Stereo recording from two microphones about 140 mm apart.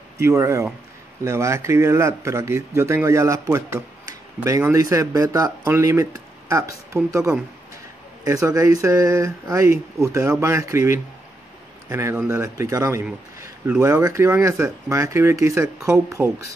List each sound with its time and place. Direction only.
0.2 s speech: 20° right (ahead or behind)
8.2 s speech: 25° right (ahead or behind)
13.7 s speech: 10° right (ahead or behind)